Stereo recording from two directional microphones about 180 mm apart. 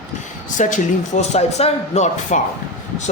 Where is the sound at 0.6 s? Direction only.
45° left (ahead or behind).